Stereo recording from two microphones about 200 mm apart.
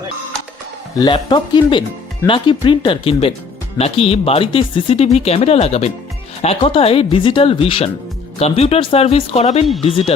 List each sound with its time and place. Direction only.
0.9 s speech: 20° left (ahead or behind)